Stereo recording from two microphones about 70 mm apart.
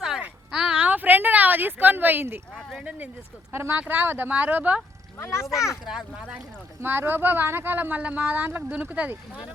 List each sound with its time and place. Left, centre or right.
0.5 s a sound: centre; by 2.4 s right
2.6 s speech: centre
3.5 s speech: right
5.2 s speech: left
5.8 s speech: centre
6.8 s speech: right